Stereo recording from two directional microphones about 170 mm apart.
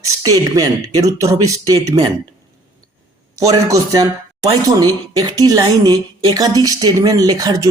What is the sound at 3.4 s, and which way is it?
A woman's voice, 20° right (ahead or behind).